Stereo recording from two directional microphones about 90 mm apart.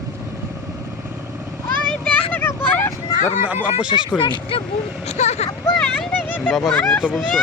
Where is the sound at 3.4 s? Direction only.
20° right (ahead or behind).